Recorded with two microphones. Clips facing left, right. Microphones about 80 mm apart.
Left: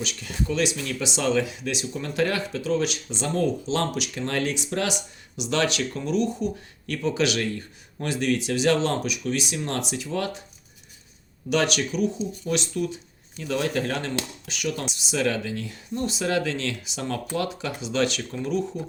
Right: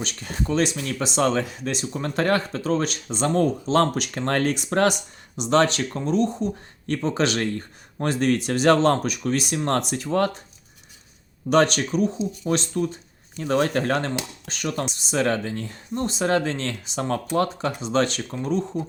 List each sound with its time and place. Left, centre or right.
0.0 s speech: right
11.4 s speech: right